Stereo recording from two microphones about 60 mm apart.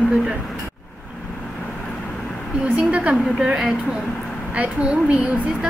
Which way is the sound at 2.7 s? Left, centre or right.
Right.